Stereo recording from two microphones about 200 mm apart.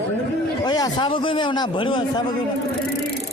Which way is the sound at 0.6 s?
20° left (ahead or behind).